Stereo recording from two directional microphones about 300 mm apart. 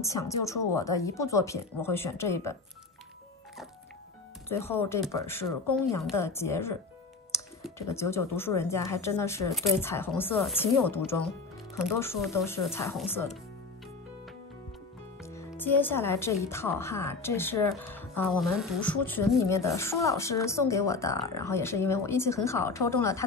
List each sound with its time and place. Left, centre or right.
0.0 s speech: centre
4.5 s speech: centre
7.8 s speech: centre
15.2 s a woman's voice: centre